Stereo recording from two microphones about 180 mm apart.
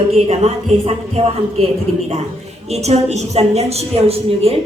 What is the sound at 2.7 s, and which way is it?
A woman's voice, 35° right (ahead or behind).